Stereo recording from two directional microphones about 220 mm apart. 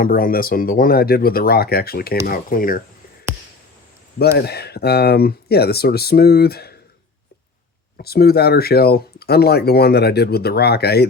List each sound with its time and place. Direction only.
0.0 s speech: 40° left (ahead or behind)
4.2 s speech: 45° left (ahead or behind)
7.9 s speech: 45° left (ahead or behind)